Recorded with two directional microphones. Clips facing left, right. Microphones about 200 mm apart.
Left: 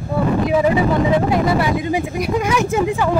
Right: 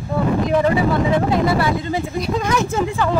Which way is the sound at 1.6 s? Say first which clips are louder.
Left 2 dB; 15° left (ahead or behind).